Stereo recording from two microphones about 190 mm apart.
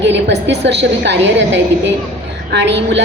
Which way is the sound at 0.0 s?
70° right (ahead or behind).